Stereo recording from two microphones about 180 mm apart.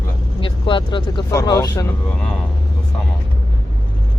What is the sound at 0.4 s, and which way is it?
Speech, 30° left (ahead or behind).